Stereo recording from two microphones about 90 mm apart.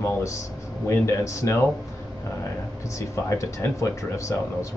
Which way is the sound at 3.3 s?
35° left (ahead or behind).